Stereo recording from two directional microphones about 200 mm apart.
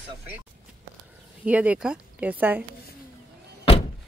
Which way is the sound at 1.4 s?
5° right (ahead or behind).